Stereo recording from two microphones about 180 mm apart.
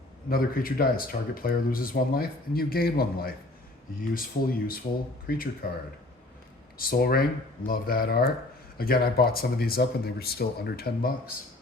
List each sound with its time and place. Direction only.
0.3 s speech: 55° left (ahead or behind)
6.7 s speech: 55° left (ahead or behind)